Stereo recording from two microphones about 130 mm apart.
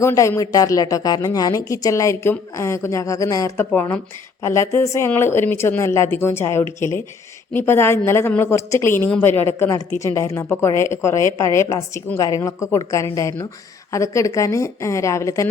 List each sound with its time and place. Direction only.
0.0 s speech: 20° left (ahead or behind)
3.7 s a woman's voice: 15° left (ahead or behind)